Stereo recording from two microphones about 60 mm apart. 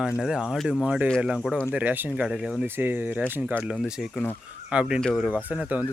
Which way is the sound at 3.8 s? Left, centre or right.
Centre.